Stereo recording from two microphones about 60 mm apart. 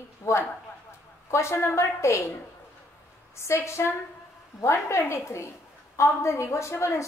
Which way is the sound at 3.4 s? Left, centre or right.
Left.